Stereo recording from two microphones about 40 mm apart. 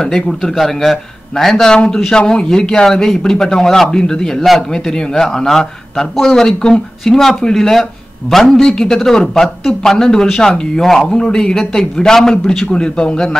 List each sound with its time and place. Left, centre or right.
0.3 s a man's voice: centre; by 10.6 s left
10.8 s speech: centre